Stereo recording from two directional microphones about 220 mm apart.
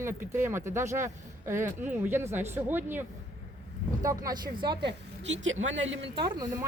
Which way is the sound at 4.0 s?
15° right (ahead or behind).